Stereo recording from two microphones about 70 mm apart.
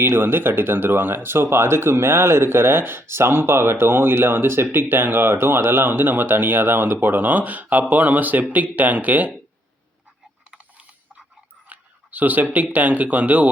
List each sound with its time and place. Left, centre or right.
0.0 s speech: right
11.7 s speech: right